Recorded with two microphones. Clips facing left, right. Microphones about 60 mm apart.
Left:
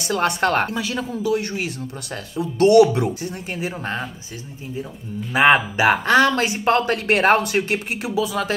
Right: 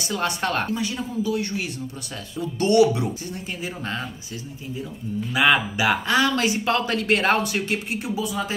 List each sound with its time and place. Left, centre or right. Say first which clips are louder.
0.1 s speech: left 6 dB; left
0.7 s speech: left 2 dB; left
2.6 s speech: left 5 dB; left
5.3 s speech: left 4 dB; left
8.0 s speech: left 4 dB; left